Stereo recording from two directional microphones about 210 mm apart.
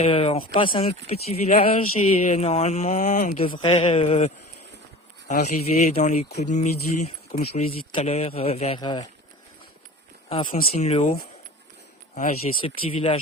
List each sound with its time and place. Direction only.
0.0 s speech: 25° left (ahead or behind)
5.3 s speech: 30° left (ahead or behind)
10.2 s speech: 30° left (ahead or behind)
12.9 s speech: 25° left (ahead or behind)